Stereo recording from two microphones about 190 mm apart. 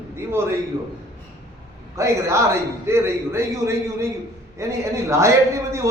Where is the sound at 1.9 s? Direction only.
15° right (ahead or behind).